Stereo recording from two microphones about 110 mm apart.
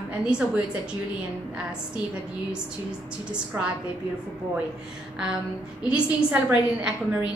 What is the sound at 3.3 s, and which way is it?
Speech, 10° right (ahead or behind).